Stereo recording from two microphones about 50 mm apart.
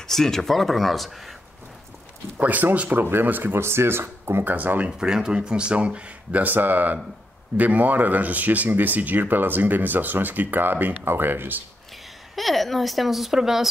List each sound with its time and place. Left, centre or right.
0.0 s speech: centre
2.3 s speech: right
3.6 s speech: right
4.5 s speech: right
4.9 s speech: centre; by 11.6 s right
12.4 s speech: centre